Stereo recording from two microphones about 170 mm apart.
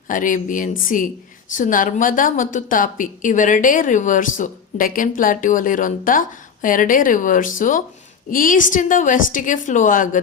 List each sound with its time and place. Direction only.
0.1 s a woman's voice: 50° left (ahead or behind)